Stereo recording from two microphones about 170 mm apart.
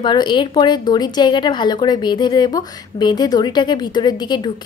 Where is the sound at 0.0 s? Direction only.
25° left (ahead or behind).